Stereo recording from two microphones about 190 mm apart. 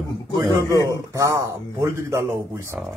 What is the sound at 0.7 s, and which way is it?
Speech, 15° right (ahead or behind).